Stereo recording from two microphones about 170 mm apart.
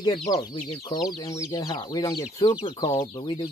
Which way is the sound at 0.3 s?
20° left (ahead or behind).